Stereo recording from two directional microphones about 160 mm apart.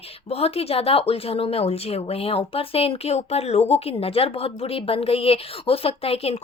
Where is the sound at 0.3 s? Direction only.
40° left (ahead or behind).